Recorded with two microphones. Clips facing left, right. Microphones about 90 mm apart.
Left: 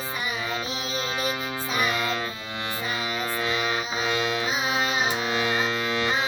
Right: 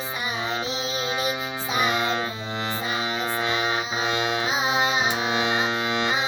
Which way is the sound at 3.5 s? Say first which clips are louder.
Right 2 dB; 25° right (ahead or behind).